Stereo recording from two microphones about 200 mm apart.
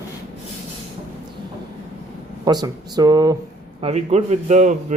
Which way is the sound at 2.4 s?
20° right (ahead or behind).